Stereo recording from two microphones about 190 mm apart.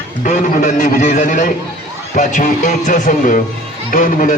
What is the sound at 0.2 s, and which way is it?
A man's voice, 40° left (ahead or behind).